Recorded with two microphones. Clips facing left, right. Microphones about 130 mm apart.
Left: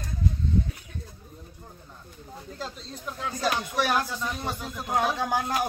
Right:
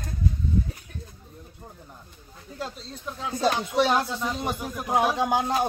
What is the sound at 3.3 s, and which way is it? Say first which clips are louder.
Speech: right 5 dB; 25° right (ahead or behind).